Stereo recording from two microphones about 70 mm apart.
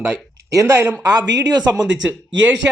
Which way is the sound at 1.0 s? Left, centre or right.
Right.